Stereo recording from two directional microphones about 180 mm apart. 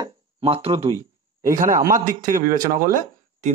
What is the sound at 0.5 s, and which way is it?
Speech, 30° right (ahead or behind).